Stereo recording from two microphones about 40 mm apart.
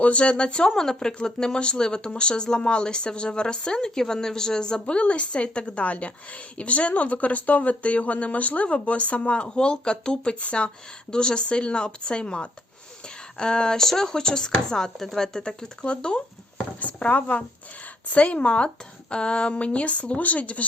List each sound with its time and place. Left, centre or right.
0.0 s speech: left
0.8 s speech: centre
4.9 s speech: left
13.4 s chopping: left
15.8 s speech: left
16.8 s speech: left